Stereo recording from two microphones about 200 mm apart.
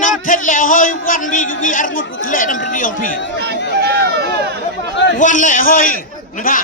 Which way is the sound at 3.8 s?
55° right (ahead or behind).